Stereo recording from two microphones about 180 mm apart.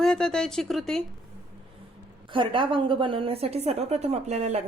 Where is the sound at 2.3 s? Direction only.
30° right (ahead or behind).